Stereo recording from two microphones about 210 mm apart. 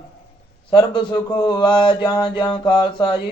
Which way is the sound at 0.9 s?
20° left (ahead or behind).